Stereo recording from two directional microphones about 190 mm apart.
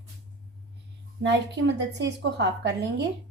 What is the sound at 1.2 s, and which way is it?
A woman's voice, 65° right (ahead or behind).